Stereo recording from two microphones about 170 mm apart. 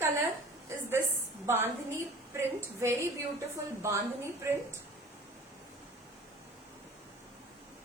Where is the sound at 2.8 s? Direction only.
15° right (ahead or behind).